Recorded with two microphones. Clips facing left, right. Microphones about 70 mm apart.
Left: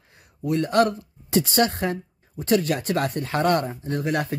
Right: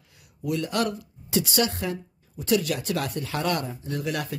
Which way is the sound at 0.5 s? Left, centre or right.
Left.